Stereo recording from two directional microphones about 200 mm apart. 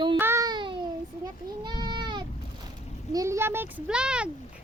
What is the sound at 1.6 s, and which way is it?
Goat, 20° right (ahead or behind).